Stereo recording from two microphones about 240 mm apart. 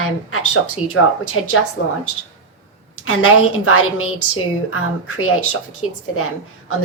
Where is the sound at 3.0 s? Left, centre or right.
Left.